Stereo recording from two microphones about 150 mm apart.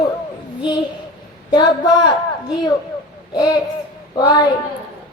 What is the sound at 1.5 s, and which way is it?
Speech, 30° left (ahead or behind).